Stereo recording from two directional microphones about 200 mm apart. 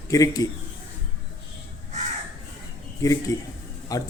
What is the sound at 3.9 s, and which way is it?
Speech, 15° left (ahead or behind).